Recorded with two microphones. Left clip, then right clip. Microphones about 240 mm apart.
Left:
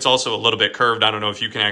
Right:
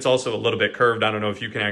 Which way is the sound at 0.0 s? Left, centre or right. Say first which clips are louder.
Left 3 dB; centre.